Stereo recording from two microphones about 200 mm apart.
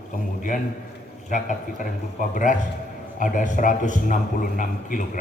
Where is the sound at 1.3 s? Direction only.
40° left (ahead or behind).